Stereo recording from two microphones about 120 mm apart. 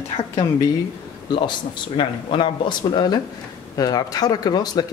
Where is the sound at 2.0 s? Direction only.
40° left (ahead or behind).